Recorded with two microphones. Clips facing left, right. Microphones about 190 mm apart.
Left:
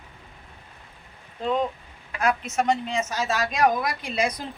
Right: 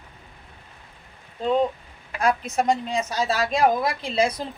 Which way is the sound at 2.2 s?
35° right (ahead or behind).